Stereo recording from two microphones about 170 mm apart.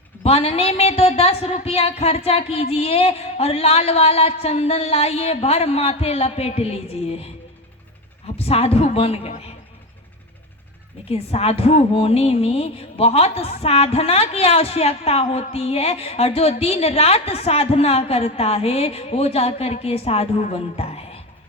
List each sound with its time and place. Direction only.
0.2 s a woman's voice: 35° left (ahead or behind)
8.4 s a woman's voice: 35° left (ahead or behind)
11.1 s a woman's voice: 35° left (ahead or behind)